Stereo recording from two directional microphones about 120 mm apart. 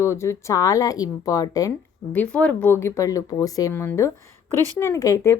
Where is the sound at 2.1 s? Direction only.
10° left (ahead or behind).